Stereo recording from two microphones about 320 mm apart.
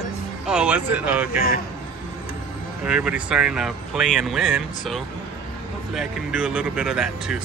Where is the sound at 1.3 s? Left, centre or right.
Left.